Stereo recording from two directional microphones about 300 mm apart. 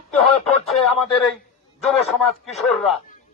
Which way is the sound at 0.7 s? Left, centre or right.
Centre.